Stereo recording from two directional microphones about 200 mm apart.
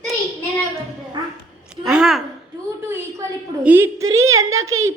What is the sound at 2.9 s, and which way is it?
A woman's voice, 15° right (ahead or behind).